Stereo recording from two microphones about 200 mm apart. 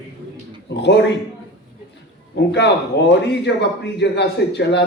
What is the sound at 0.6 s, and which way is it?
Speech, 60° left (ahead or behind).